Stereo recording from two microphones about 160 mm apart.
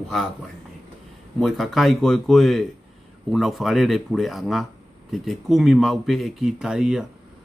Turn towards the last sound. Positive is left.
turn(degrees=-5)  # may be behind; listen again after turning